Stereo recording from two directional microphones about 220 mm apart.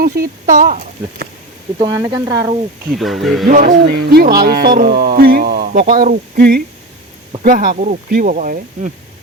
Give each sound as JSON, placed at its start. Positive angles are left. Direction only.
{"t": 0.0, "sound": "speech", "side_deg": -40}
{"t": 1.8, "sound": "speech", "side_deg": -15}
{"t": 2.9, "sound": "speech", "side_deg": 0}
{"t": 3.4, "sound": "speech", "side_deg": -40}